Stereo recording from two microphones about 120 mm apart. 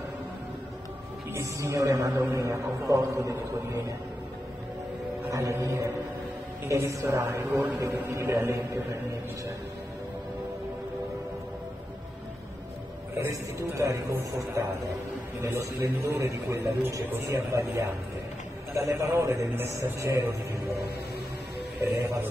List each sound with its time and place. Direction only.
1.3 s a man's voice: 25° right (ahead or behind)
5.3 s a man's voice: 25° right (ahead or behind)
13.2 s a man's voice: 20° right (ahead or behind)
21.8 s a man's voice: 25° right (ahead or behind)